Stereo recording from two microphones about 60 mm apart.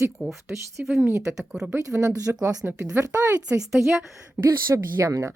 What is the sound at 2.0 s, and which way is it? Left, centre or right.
Speech, right.